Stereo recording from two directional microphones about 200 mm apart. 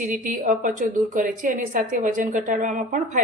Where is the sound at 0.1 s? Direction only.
40° right (ahead or behind).